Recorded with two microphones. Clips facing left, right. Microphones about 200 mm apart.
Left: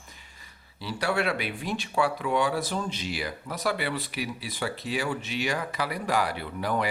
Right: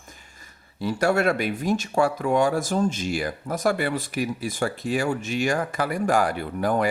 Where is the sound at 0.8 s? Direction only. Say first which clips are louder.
Right 6 dB; 45° right (ahead or behind).